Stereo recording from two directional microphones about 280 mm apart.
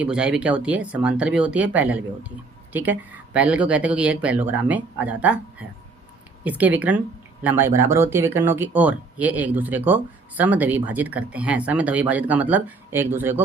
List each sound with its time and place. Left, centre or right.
0.0 s speech: centre